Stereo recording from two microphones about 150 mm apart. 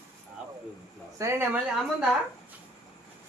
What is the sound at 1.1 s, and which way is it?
Speech, 15° right (ahead or behind).